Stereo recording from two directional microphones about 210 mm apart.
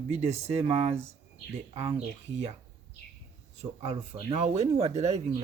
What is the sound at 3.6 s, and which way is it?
Speech, 30° right (ahead or behind).